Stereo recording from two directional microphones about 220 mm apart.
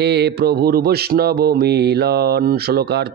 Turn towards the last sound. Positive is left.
turn(degrees=-45)  # may be behind; listen again after turning